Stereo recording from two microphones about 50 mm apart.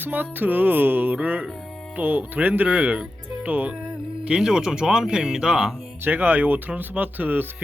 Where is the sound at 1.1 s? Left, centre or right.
Right.